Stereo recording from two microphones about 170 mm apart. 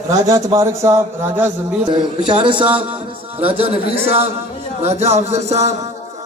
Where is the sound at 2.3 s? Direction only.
30° right (ahead or behind).